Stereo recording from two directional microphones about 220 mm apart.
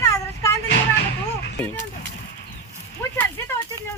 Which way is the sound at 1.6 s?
5° left (ahead or behind).